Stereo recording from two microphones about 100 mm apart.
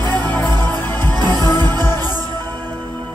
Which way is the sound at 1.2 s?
40° right (ahead or behind).